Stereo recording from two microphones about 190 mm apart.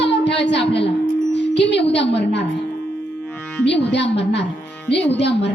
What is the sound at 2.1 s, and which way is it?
Speech, 65° left (ahead or behind).